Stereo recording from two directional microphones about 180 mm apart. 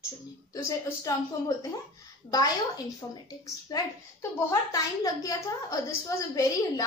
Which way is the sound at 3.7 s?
20° left (ahead or behind).